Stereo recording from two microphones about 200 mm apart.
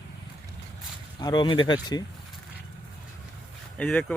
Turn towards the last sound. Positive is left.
turn(degrees=5)  # may be behind; listen again after turning